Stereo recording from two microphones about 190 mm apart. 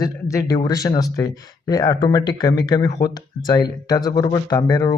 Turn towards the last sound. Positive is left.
turn(degrees=20)  # may be behind; listen again after turning